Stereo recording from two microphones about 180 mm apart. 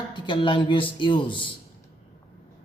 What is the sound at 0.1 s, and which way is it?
Speech, 25° left (ahead or behind).